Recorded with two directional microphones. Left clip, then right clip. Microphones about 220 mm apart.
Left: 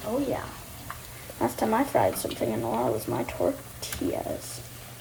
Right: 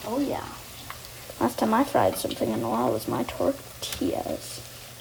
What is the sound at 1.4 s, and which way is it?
Speech, 45° right (ahead or behind).